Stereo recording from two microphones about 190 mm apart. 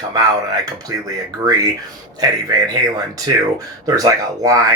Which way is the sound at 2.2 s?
20° right (ahead or behind).